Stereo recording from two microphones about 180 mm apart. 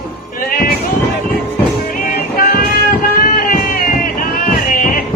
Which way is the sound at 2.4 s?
50° left (ahead or behind).